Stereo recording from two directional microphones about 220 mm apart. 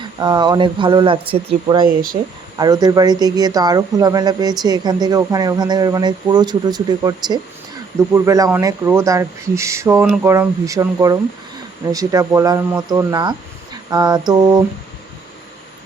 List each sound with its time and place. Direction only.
0.2 s speech: 20° right (ahead or behind)